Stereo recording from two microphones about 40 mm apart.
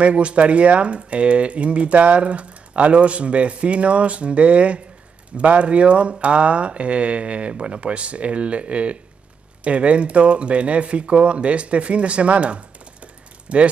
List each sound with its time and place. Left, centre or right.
0.0 s speech: right